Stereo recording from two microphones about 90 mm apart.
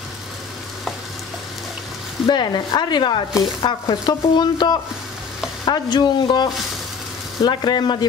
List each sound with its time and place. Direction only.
2.2 s a man's voice: 55° left (ahead or behind)